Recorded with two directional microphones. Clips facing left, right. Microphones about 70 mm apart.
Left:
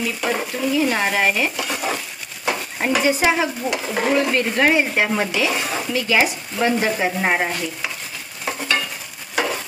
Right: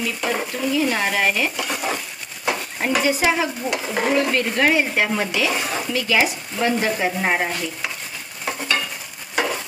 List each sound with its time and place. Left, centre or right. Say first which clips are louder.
0.2 s speech: left 1 dB; centre
0.9 s frying: left 1 dB; left
1.6 s stir: left 1 dB; centre
3.0 s frying: left 1 dB; left
3.7 s stir: even; centre
4.1 s frying: left 1 dB; centre
5.5 s stir: left 1 dB; centre
5.9 s frying: left 1 dB; centre
8.5 s stir: left 1 dB; centre